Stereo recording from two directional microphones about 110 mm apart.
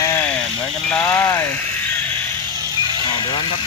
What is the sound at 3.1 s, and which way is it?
Speech, 45° left (ahead or behind).